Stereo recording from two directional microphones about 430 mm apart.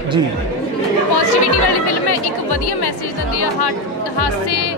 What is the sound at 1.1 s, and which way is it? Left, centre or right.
Speech, left.